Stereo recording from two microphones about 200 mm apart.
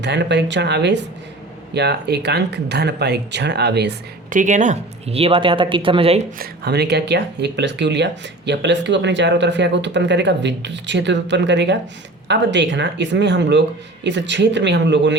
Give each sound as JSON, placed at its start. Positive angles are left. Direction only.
{"t": 0.0, "sound": "speech", "side_deg": -60}
{"t": 4.3, "sound": "speech", "side_deg": -40}
{"t": 6.4, "sound": "speech", "side_deg": -55}